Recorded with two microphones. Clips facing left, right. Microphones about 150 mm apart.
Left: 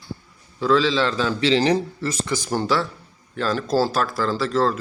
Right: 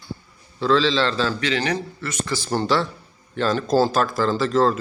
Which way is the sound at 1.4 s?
30° left (ahead or behind).